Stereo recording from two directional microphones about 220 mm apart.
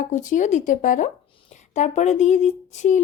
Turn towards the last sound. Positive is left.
turn(degrees=35)  # may be behind; listen again after turning